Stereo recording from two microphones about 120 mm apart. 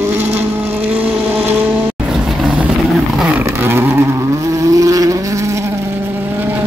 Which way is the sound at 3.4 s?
20° right (ahead or behind).